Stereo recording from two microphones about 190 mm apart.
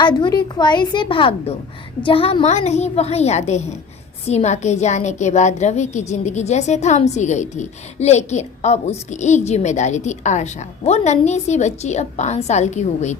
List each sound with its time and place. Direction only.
0.0 s a woman's voice: 25° left (ahead or behind)